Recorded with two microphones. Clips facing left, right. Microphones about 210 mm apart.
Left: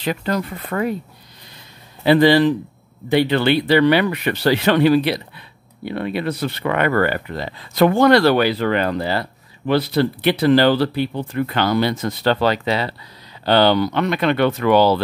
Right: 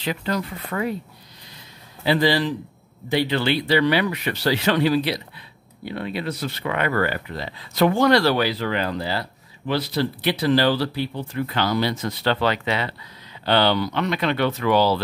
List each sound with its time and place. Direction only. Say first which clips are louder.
0.0 s speech: left 4 dB; 50° left (ahead or behind)
2.0 s speech: left 7 dB; 60° left (ahead or behind)